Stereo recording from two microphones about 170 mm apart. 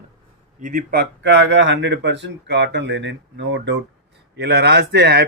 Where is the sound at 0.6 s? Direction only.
55° right (ahead or behind); by 3.8 s 90° right.